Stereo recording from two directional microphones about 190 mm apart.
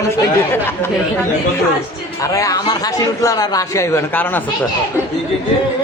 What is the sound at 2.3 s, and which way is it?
Speech, 20° left (ahead or behind).